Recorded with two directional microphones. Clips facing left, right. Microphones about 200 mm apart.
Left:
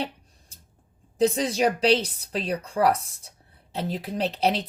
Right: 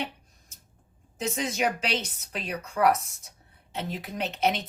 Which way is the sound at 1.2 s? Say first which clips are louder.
Left 6 dB; 35° left (ahead or behind).